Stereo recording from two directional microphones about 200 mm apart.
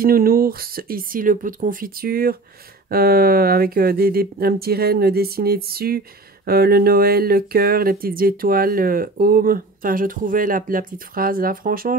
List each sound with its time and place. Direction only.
0.0 s speech: 45° right (ahead or behind)